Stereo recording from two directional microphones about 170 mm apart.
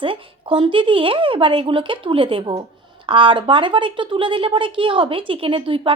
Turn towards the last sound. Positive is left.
turn(degrees=-30)  # may be behind; listen again after turning